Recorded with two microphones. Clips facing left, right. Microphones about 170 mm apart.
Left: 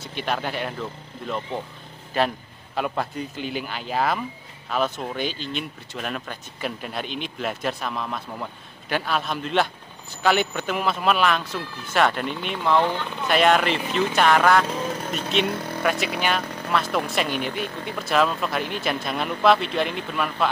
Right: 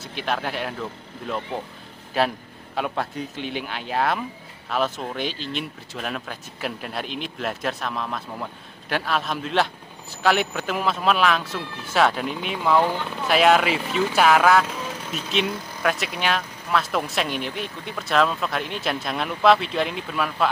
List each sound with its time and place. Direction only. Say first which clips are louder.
0.0 s speech: even; centre (ahead or behind)
2.1 s speech: even; centre (ahead or behind)
15.4 s speech: left 2 dB; 65° left (ahead or behind)
15.8 s speech: even; centre (ahead or behind)